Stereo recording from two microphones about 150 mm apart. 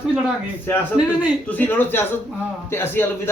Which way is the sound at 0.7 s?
15° left (ahead or behind).